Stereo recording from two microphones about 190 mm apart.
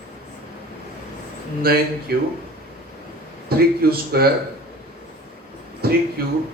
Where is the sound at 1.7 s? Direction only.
55° right (ahead or behind).